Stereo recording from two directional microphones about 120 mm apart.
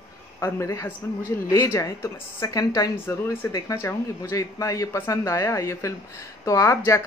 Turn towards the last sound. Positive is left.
turn(degrees=25)  # may be behind; listen again after turning